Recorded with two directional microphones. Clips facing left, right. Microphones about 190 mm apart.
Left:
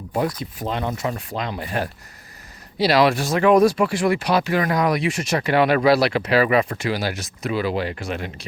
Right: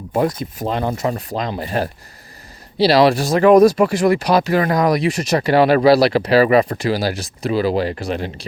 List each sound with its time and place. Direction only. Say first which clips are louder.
0.1 s speech: right 5 dB; 45° right (ahead or behind)